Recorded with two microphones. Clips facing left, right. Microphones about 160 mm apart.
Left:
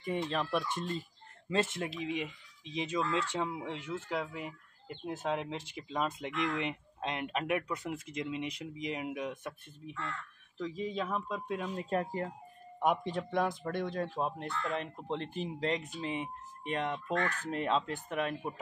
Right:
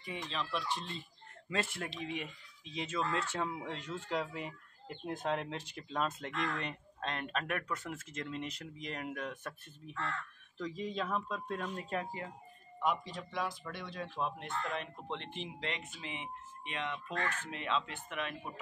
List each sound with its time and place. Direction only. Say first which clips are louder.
0.3 s speech: left 4 dB; 55° left (ahead or behind)
1.5 s speech: left 5 dB; 25° left (ahead or behind)
10.6 s speech: left 2 dB; 5° left (ahead or behind)
11.7 s speech: left 5 dB; 30° left (ahead or behind)
12.0 s speech: left 6 dB; 45° left (ahead or behind)